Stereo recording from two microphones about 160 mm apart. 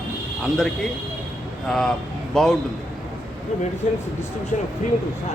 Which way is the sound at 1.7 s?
Centre (ahead or behind).